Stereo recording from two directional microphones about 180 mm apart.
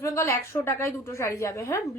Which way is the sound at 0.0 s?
15° left (ahead or behind).